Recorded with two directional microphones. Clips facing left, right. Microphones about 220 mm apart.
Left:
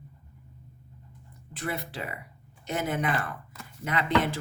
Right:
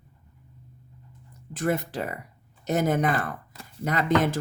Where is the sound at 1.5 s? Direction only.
45° right (ahead or behind).